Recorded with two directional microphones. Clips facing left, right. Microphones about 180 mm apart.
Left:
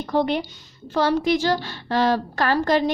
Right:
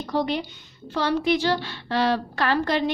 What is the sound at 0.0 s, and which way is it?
Speech, 50° left (ahead or behind).